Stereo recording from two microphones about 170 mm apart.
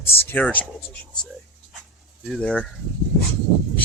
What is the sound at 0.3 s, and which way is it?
Speech, 10° left (ahead or behind).